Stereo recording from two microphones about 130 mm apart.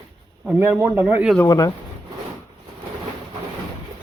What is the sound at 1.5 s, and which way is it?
Speech, 30° left (ahead or behind).